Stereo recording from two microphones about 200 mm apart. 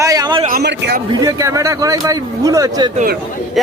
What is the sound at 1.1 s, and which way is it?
Speech, 20° right (ahead or behind).